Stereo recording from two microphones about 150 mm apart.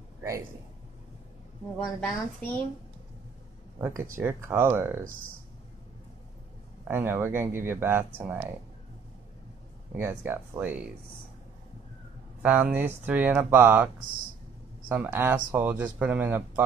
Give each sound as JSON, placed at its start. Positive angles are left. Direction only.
{"t": 1.8, "sound": "a woman's voice", "side_deg": 10}
{"t": 4.2, "sound": "speech", "side_deg": -15}
{"t": 6.8, "sound": "speech", "side_deg": -15}
{"t": 9.9, "sound": "speech", "side_deg": -15}
{"t": 12.4, "sound": "speech", "side_deg": -10}
{"t": 14.9, "sound": "speech", "side_deg": -15}